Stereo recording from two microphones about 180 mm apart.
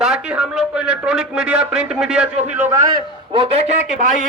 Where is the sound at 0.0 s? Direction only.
5° right (ahead or behind).